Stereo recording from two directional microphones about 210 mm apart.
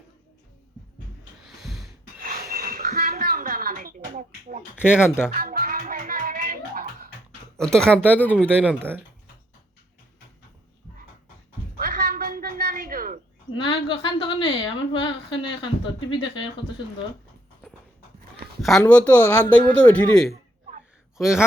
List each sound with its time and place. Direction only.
1.5 s snort: centre (ahead or behind)
2.2 s a sound: 45° right (ahead or behind)
4.9 s a man's voice: 10° left (ahead or behind)
5.3 s music: 40° right (ahead or behind)
7.6 s speech: 5° left (ahead or behind)
8.6 s speech: 10° right (ahead or behind)
11.8 s cat: 45° right (ahead or behind)
13.5 s a woman's voice: 25° left (ahead or behind)
18.6 s a man's voice: 5° left (ahead or behind)